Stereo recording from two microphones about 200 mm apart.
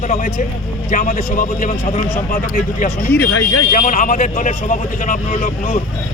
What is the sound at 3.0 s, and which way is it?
Speech, 10° left (ahead or behind).